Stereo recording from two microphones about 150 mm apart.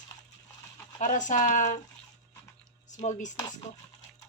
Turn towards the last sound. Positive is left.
turn(degrees=50)  # may be behind; listen again after turning